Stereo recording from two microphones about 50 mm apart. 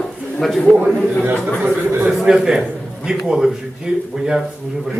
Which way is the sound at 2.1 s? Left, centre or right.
Centre.